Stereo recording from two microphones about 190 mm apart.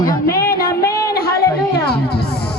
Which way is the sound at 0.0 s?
50° left (ahead or behind).